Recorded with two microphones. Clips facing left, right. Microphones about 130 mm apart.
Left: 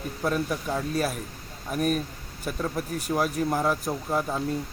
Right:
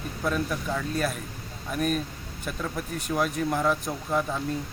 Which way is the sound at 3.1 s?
20° left (ahead or behind).